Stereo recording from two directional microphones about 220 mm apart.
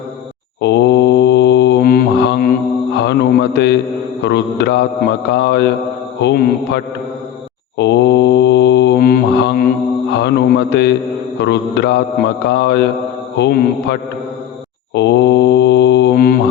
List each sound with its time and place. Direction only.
0.6 s mantra: 50° left (ahead or behind)
2.9 s speech: 50° left (ahead or behind)
4.2 s mantra: 50° left (ahead or behind)
10.1 s a man's voice: 50° left (ahead or behind)
11.3 s mantra: 50° left (ahead or behind)